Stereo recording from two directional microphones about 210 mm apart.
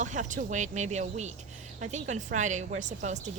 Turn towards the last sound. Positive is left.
turn(degrees=-35)  # may be behind; listen again after turning